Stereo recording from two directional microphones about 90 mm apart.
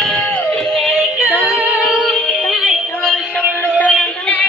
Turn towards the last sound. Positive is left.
turn(degrees=5)  # may be behind; listen again after turning